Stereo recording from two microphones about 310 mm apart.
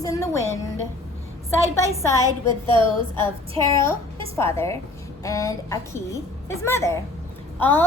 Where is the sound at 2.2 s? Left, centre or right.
Centre.